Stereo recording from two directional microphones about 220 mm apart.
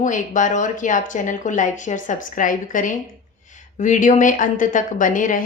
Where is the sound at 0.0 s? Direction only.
35° left (ahead or behind).